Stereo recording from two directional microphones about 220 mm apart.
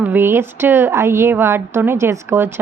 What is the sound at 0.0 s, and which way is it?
Speech, 10° right (ahead or behind).